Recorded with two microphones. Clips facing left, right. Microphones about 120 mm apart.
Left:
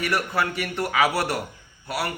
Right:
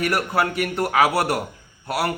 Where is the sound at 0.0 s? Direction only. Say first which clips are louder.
Right 3 dB; 45° right (ahead or behind).